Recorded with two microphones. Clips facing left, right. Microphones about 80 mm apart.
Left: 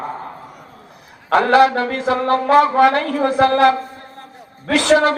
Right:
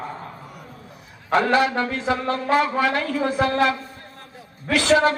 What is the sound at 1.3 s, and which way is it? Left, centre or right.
Speech, left.